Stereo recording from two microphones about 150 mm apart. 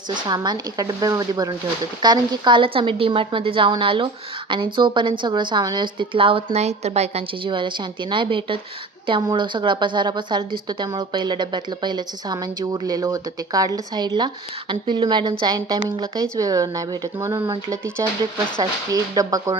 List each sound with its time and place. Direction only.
0.1 s a woman's voice: 30° right (ahead or behind)